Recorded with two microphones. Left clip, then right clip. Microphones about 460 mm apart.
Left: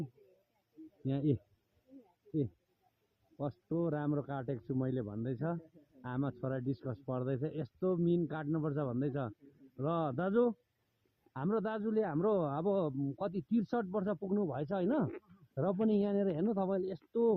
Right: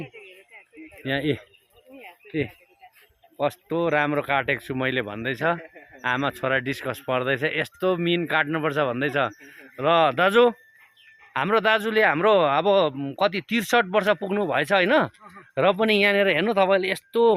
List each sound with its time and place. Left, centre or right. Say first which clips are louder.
1.0 s speech: right 11 dB; centre
3.3 s speech: right 13 dB; centre